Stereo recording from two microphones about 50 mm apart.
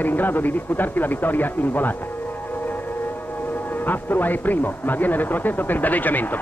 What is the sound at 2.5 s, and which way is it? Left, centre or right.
Music, left.